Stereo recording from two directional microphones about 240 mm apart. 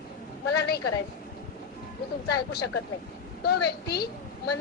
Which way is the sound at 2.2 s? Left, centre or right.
Left.